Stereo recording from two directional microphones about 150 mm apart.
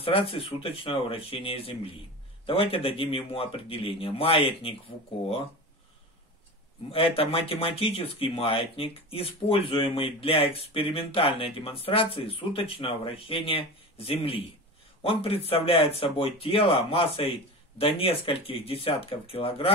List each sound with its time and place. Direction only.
0.0 s speech: 40° left (ahead or behind)
6.9 s speech: 40° left (ahead or behind)